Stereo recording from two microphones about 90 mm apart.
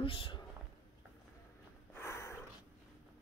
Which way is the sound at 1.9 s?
30° left (ahead or behind).